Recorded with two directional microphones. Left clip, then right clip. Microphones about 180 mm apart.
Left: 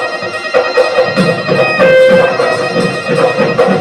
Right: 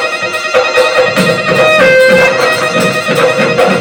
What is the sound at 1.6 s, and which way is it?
Music, 20° right (ahead or behind).